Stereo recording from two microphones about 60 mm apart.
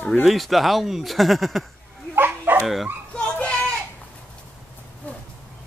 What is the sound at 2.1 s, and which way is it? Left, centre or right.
Dog, right.